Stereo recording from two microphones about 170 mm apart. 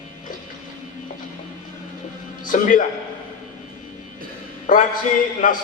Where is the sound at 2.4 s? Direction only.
50° left (ahead or behind).